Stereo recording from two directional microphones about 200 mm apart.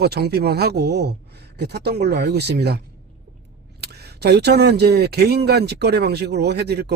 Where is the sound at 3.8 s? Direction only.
55° right (ahead or behind).